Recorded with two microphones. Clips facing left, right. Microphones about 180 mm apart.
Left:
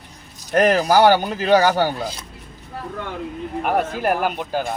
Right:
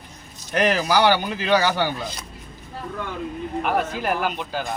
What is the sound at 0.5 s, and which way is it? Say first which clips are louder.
Speech: left 5 dB; 45° left (ahead or behind).